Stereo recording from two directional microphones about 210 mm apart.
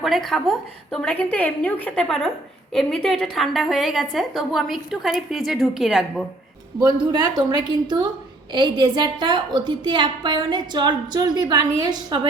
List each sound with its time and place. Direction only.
0.0 s a woman's voice: centre (ahead or behind)
6.9 s a woman's voice: 20° right (ahead or behind)